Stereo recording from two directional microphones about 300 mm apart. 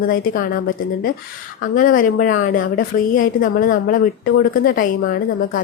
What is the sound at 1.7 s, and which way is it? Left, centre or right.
A woman's voice, left.